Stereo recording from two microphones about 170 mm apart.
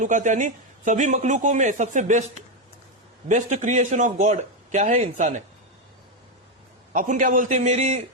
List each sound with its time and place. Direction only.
0.0 s a man's voice: 45° right (ahead or behind)
3.2 s a man's voice: 45° right (ahead or behind)
6.9 s a man's voice: 50° right (ahead or behind)